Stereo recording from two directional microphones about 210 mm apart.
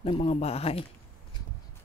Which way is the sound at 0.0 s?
25° left (ahead or behind).